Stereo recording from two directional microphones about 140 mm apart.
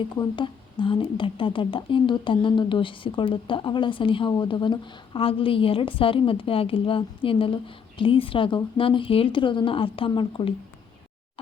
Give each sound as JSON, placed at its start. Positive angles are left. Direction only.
{"t": 0.3, "sound": "speech", "side_deg": 35}